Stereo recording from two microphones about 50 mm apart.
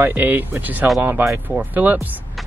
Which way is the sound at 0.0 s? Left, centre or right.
Right.